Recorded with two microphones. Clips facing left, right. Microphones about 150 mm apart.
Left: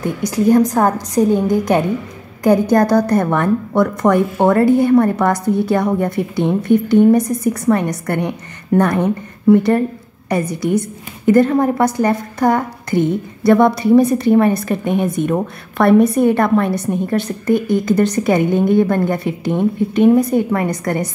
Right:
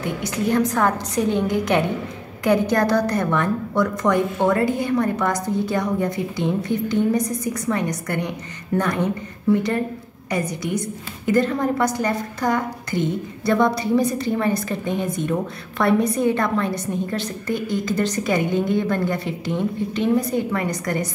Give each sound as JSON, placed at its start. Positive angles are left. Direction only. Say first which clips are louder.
{"t": 0.0, "sound": "a woman's voice", "louder": "left 7 dB", "side_deg": 40}
{"t": 11.2, "sound": "a woman's voice", "louder": "left 7 dB", "side_deg": 50}